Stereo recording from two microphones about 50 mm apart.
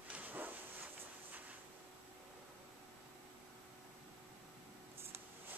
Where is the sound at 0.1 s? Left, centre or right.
Right.